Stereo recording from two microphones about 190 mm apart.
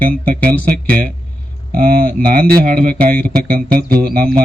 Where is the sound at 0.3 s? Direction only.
5° left (ahead or behind).